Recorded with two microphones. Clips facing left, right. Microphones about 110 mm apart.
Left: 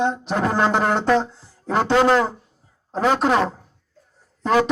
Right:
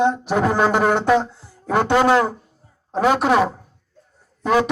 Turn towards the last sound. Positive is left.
turn(degrees=-10)  # may be behind; listen again after turning